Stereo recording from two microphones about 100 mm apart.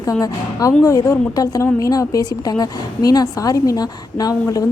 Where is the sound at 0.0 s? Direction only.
35° left (ahead or behind).